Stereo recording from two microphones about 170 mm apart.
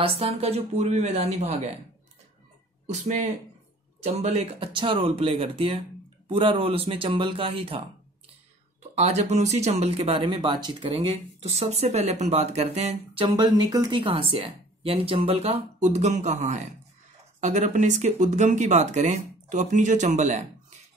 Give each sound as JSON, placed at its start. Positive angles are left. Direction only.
{"t": 0.0, "sound": "speech", "side_deg": -35}
{"t": 2.9, "sound": "speech", "side_deg": -45}
{"t": 8.9, "sound": "speech", "side_deg": -40}